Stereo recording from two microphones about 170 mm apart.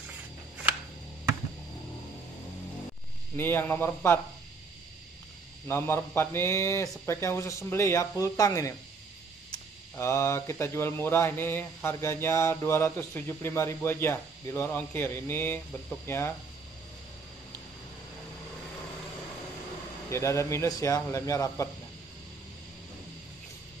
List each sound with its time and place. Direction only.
3.3 s speech: 10° left (ahead or behind)
5.7 s speech: 15° left (ahead or behind)
20.1 s speech: 15° left (ahead or behind)